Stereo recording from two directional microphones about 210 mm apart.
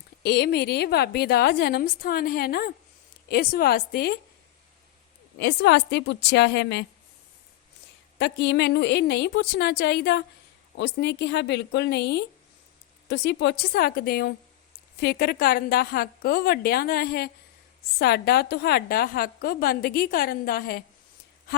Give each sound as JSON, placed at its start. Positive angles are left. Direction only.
{"t": 0.2, "sound": "a woman's voice", "side_deg": 50}
{"t": 5.4, "sound": "a woman's voice", "side_deg": 55}
{"t": 8.2, "sound": "a woman's voice", "side_deg": 55}